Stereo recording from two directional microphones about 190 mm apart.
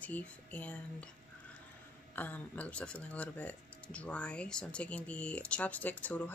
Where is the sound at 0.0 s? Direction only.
10° left (ahead or behind).